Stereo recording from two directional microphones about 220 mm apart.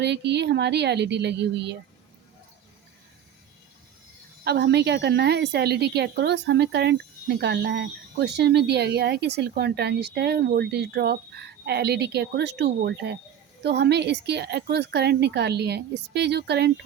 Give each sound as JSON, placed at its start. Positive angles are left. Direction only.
{"t": 0.0, "sound": "speech", "side_deg": -50}
{"t": 4.4, "sound": "speech", "side_deg": -50}